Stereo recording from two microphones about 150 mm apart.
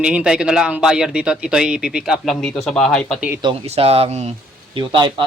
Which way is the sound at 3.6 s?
45° right (ahead or behind).